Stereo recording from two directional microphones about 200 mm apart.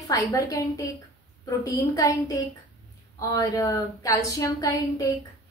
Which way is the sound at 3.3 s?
20° left (ahead or behind).